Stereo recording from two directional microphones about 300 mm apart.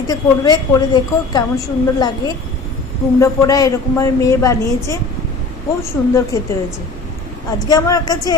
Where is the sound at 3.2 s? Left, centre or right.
Centre.